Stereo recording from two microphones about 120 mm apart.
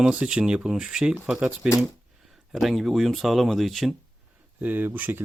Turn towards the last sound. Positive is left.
turn(degrees=-15)  # may be behind; listen again after turning